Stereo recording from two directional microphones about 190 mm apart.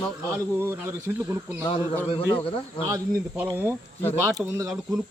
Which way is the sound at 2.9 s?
10° right (ahead or behind).